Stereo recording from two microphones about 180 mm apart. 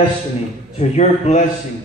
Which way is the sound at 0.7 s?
35° left (ahead or behind).